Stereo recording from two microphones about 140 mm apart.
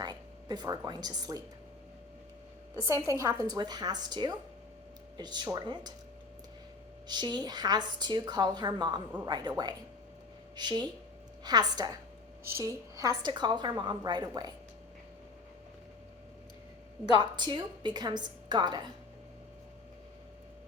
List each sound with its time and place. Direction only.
0.0 s speech: 30° right (ahead or behind)
2.8 s a woman's voice: 20° right (ahead or behind)
7.1 s a woman's voice: 30° right (ahead or behind)
13.2 s a woman's voice: 30° right (ahead or behind)
17.2 s a woman's voice: 35° right (ahead or behind)